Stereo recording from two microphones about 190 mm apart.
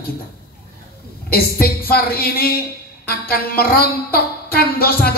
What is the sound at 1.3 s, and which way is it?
Music, 50° left (ahead or behind).